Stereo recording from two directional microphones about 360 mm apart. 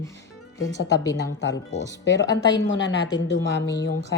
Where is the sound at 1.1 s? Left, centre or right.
Left.